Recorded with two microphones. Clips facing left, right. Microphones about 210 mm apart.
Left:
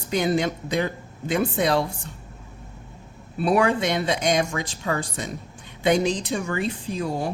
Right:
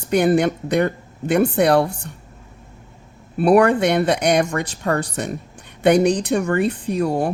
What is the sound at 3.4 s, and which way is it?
Speech, 55° right (ahead or behind).